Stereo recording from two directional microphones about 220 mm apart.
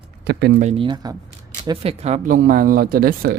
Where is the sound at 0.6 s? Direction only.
25° right (ahead or behind); by 3.3 s 40° right (ahead or behind).